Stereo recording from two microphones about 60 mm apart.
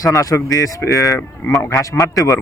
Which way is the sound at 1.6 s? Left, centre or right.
Left.